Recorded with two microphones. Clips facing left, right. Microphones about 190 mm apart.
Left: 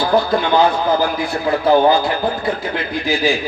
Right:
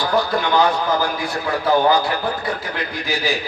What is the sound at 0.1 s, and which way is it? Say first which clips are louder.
A man's voice: left 3 dB; 25° left (ahead or behind).